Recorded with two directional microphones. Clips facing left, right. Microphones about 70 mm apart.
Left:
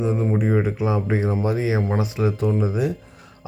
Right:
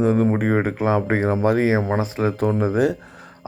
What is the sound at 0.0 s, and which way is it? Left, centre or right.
Speech, right.